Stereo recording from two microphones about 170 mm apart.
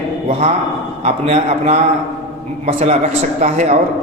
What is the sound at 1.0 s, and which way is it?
A man's voice, 40° right (ahead or behind).